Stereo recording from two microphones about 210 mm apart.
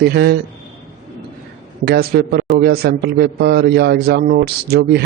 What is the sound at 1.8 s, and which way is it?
A man's voice, 50° right (ahead or behind).